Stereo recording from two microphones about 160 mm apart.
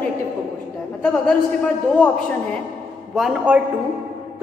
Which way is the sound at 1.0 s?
5° left (ahead or behind).